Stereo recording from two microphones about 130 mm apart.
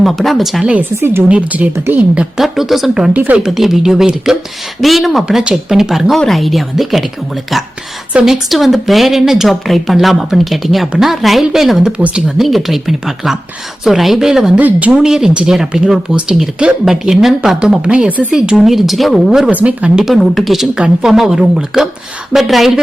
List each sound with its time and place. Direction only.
0.0 s speech: centre (ahead or behind)
2.4 s speech: centre (ahead or behind)